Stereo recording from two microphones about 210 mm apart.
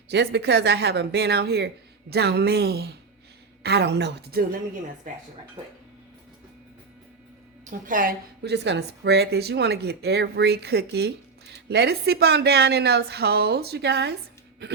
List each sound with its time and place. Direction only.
0.1 s a woman's voice: 55° right (ahead or behind)
7.7 s a woman's voice: 40° right (ahead or behind)